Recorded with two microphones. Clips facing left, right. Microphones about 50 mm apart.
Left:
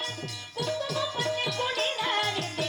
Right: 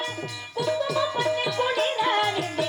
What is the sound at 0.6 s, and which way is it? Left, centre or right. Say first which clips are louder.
Music: right 6 dB; centre.